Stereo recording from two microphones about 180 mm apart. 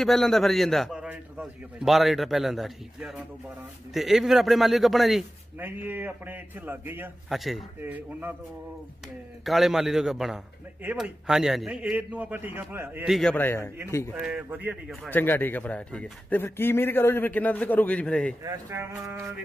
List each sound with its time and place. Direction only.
0.0 s a man's voice: centre (ahead or behind)
9.4 s a man's voice: centre (ahead or behind)
13.1 s a man's voice: 5° left (ahead or behind)
14.2 s a man's voice: 10° right (ahead or behind)
15.0 s a man's voice: 10° left (ahead or behind)
18.4 s a man's voice: 15° right (ahead or behind)